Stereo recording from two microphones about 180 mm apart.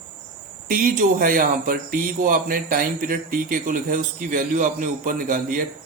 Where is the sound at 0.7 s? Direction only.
50° right (ahead or behind).